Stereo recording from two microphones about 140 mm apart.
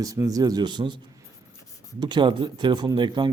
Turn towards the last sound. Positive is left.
turn(degrees=-35)  # may be behind; listen again after turning